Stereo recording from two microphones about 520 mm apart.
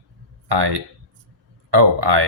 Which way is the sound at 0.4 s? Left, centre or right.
Right.